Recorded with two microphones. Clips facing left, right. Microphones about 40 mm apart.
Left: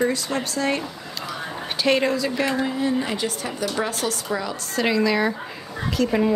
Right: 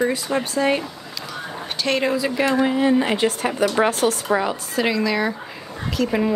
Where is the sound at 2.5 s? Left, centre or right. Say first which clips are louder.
Right 5 dB; right.